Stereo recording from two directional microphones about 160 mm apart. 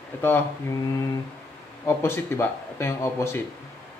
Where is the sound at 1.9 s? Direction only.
15° left (ahead or behind).